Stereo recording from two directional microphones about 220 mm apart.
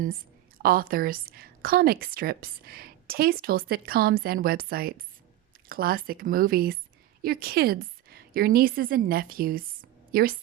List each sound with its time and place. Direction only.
0.6 s a woman's voice: 40° right (ahead or behind)